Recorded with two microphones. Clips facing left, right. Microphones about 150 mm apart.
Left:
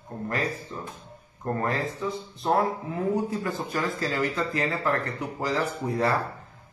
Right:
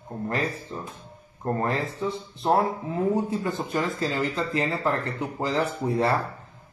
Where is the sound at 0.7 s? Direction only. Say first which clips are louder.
Right 1 dB; 30° right (ahead or behind).